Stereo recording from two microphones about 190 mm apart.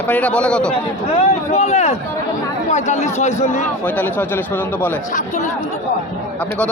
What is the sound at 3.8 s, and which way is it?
Speech, 10° left (ahead or behind).